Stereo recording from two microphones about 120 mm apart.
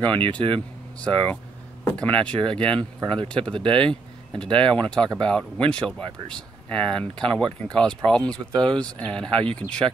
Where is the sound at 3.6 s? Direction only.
45° right (ahead or behind).